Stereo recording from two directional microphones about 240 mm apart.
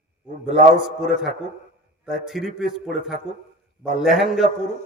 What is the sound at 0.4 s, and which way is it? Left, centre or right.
Speech, right.